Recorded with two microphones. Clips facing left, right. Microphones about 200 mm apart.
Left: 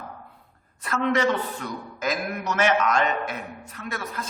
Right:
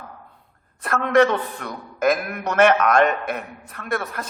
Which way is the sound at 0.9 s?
55° right (ahead or behind).